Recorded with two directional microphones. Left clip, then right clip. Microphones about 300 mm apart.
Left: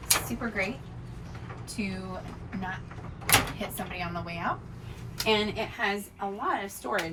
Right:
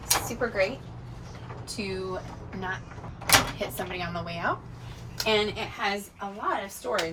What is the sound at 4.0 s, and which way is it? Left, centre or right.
A woman's voice, centre.